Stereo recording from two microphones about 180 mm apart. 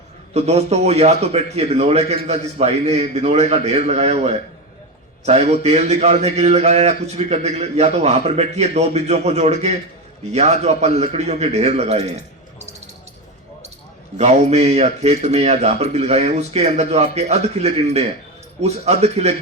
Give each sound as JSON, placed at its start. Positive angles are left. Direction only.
{"t": 0.3, "sound": "a man's voice", "side_deg": -35}
{"t": 14.2, "sound": "a man's voice", "side_deg": -40}